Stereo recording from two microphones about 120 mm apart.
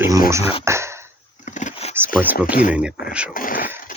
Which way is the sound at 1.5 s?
90° left.